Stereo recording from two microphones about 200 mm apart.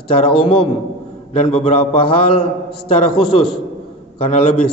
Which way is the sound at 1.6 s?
25° left (ahead or behind).